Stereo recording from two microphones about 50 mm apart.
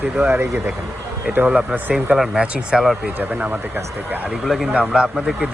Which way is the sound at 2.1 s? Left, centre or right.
Centre.